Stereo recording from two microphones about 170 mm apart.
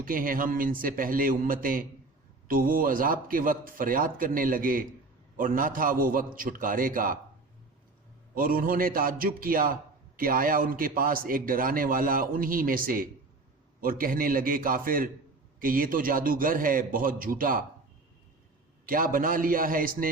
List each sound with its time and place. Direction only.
0.0 s a man's voice: 55° right (ahead or behind)
8.4 s a man's voice: 55° right (ahead or behind)
18.9 s a man's voice: 55° right (ahead or behind)